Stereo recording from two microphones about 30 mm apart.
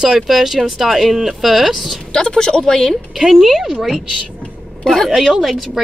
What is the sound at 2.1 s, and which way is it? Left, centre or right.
Speech, left.